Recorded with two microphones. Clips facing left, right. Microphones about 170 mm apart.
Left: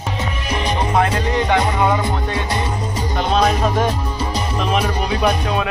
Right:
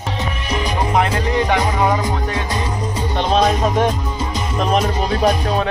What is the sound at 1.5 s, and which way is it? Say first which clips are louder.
Music: left 2 dB; 15° right (ahead or behind).